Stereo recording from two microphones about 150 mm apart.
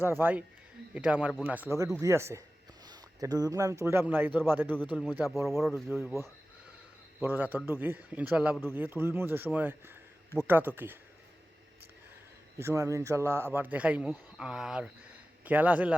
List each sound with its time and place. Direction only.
0.0 s a man's voice: 15° right (ahead or behind)
7.2 s a man's voice: 10° right (ahead or behind)
12.6 s a man's voice: 20° right (ahead or behind)